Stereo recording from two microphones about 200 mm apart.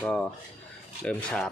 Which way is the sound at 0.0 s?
5° left (ahead or behind).